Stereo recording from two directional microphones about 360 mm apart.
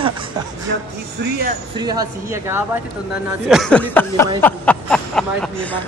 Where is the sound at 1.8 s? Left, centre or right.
Centre.